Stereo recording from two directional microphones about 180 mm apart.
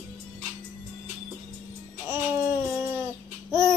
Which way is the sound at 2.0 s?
15° right (ahead or behind).